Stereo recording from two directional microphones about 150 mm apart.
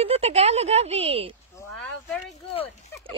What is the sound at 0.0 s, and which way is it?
Speech, 45° right (ahead or behind).